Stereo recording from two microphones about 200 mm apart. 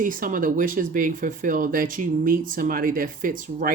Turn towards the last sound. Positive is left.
turn(degrees=-45)  # may be behind; listen again after turning